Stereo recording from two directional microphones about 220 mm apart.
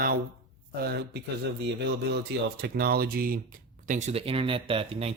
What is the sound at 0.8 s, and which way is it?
Speech, 45° right (ahead or behind).